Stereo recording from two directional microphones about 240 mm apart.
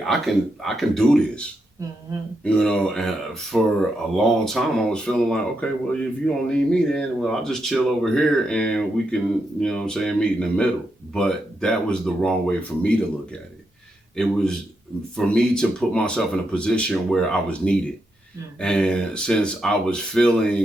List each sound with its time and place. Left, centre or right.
0.0 s speech: centre
14.2 s speech: centre